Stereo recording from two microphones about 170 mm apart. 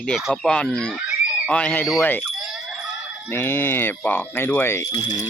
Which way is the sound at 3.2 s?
15° left (ahead or behind).